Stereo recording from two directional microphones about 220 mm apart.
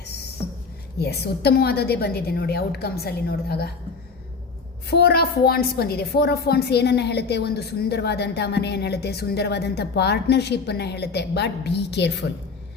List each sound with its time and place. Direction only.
0.9 s a woman's voice: 50° left (ahead or behind)
4.9 s a woman's voice: 45° left (ahead or behind)